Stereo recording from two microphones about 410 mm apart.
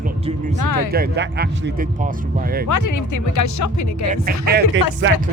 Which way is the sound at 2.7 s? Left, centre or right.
Left.